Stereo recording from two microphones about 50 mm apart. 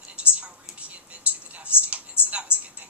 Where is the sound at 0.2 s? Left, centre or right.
Right.